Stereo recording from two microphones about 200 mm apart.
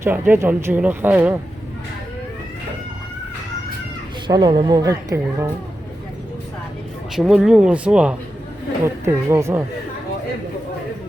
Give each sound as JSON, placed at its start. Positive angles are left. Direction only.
{"t": 0.0, "sound": "speech", "side_deg": -10}
{"t": 4.3, "sound": "speech", "side_deg": -20}
{"t": 7.2, "sound": "speech", "side_deg": 0}